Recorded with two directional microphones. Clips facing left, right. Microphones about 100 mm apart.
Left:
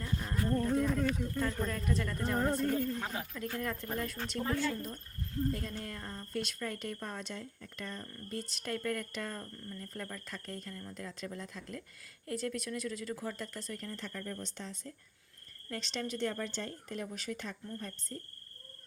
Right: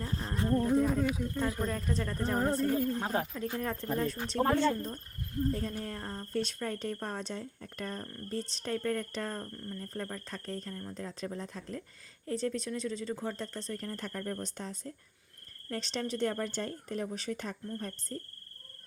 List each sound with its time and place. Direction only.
0.0 s a sound: 30° right (ahead or behind)
0.4 s a sound: 15° right (ahead or behind)
1.6 s speech: 30° right (ahead or behind)
2.4 s speech: 5° right (ahead or behind)
3.3 s speech: 25° right (ahead or behind); by 8.1 s 45° right (ahead or behind)
8.1 s speech: 35° right (ahead or behind)
13.8 s speech: 45° right (ahead or behind)